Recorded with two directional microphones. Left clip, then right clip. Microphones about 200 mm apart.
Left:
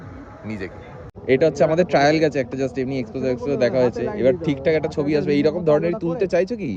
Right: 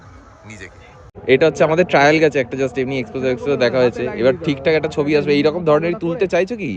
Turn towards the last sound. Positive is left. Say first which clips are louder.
# right 3 dB
turn(degrees=-10)  # may be behind; listen again after turning